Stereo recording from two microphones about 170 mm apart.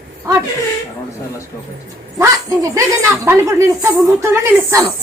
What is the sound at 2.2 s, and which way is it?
A woman's voice, 20° right (ahead or behind).